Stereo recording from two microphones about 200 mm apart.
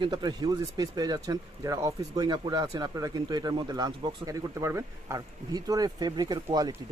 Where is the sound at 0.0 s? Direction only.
20° right (ahead or behind).